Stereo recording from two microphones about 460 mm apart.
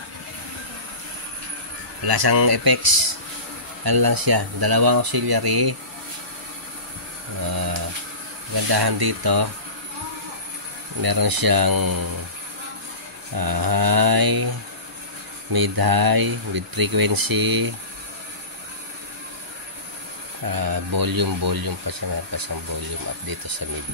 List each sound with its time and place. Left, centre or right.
2.0 s speech: right
8.6 s speech: right
11.0 s speech: right
13.4 s speech: right
15.5 s speech: right
20.4 s speech: right